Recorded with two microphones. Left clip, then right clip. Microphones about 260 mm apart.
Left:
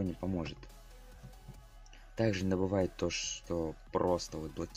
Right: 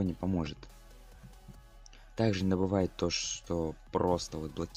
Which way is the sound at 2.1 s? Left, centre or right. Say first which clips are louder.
Right 2 dB; centre.